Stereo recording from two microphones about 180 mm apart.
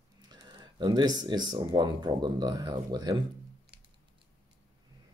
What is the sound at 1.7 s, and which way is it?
Speech, 25° right (ahead or behind).